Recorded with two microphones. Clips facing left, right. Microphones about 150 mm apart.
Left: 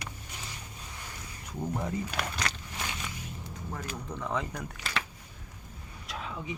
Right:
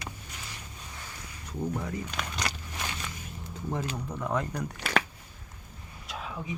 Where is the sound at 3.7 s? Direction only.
25° right (ahead or behind).